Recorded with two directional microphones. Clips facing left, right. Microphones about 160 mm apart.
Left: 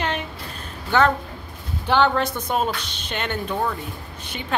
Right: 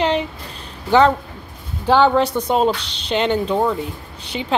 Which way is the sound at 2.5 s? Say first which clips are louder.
Right 6 dB; 30° right (ahead or behind).